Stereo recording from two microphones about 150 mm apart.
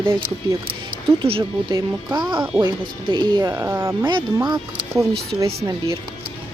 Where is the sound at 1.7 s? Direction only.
25° right (ahead or behind).